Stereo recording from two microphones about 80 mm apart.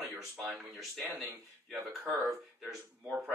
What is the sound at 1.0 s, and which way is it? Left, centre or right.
Speech, right.